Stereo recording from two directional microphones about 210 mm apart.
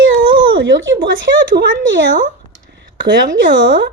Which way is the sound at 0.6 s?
60° right (ahead or behind).